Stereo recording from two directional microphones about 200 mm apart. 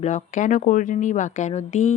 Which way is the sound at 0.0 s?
35° left (ahead or behind).